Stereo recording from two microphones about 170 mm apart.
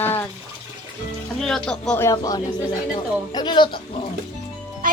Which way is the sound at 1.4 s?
5° left (ahead or behind).